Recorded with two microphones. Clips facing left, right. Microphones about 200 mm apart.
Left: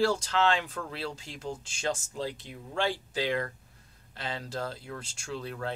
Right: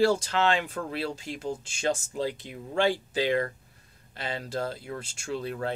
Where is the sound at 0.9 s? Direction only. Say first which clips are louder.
Right 5 dB; 10° right (ahead or behind).